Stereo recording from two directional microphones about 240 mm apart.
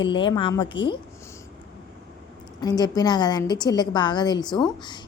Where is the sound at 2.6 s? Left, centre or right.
Centre.